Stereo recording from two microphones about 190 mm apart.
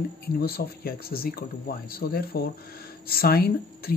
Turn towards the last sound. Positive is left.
turn(degrees=55)  # may be behind; listen again after turning